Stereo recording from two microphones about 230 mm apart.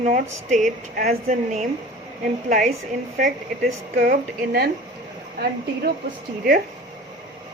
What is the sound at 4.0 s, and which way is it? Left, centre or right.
Speech, right.